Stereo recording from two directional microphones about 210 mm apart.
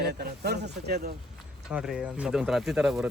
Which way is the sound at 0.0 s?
50° right (ahead or behind).